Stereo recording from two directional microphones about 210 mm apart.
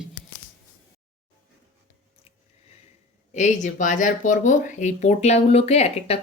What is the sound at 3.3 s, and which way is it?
Speech, 35° left (ahead or behind).